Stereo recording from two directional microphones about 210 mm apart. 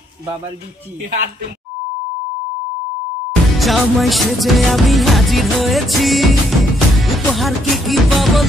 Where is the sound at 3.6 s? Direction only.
Centre (ahead or behind).